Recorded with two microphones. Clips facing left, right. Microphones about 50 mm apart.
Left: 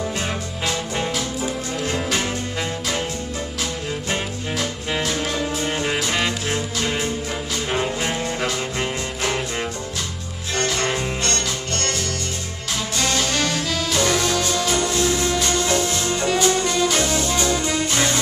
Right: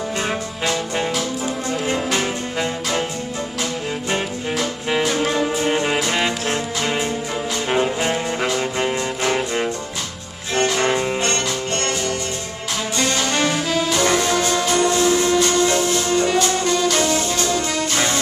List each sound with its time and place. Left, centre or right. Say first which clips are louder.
0.7 s music: right 3 dB; centre
4.1 s music: right 4 dB; centre
12.9 s music: right 2 dB; centre
17.4 s music: even; centre
17.9 s music: right 1 dB; centre